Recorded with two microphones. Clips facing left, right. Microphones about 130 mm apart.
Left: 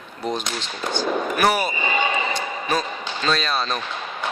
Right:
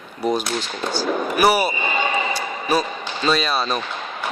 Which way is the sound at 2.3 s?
10° right (ahead or behind).